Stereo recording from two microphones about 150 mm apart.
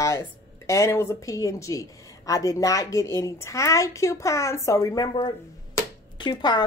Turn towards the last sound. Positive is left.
turn(degrees=30)  # may be behind; listen again after turning